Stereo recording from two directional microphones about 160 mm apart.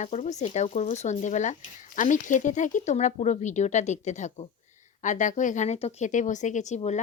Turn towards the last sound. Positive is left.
turn(degrees=45)  # may be behind; listen again after turning